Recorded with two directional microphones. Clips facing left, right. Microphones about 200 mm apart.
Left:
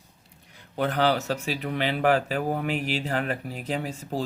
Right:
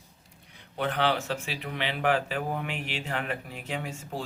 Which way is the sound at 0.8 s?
40° left (ahead or behind).